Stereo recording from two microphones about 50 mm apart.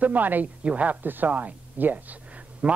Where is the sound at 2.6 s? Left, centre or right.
Right.